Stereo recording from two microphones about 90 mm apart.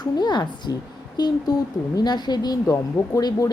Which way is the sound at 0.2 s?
55° left (ahead or behind).